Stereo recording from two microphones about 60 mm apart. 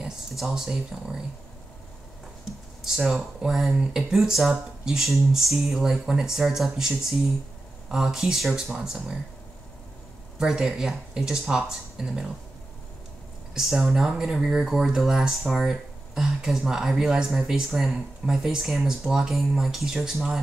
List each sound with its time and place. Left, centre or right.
0.0 s a sound: centre
2.8 s speech: centre
10.4 s speech: centre
13.6 s speech: centre